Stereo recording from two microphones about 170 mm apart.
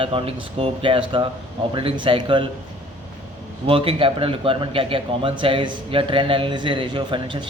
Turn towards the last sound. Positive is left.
turn(degrees=-30)  # may be behind; listen again after turning